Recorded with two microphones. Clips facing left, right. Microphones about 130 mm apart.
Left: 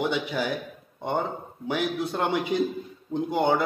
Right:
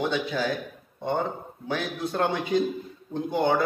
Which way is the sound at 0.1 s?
15° left (ahead or behind).